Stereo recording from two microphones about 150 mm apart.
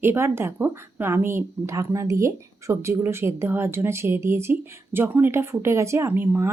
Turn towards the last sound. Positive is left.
turn(degrees=-15)  # may be behind; listen again after turning